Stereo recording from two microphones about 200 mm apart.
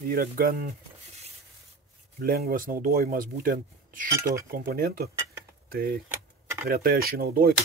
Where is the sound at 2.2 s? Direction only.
50° right (ahead or behind).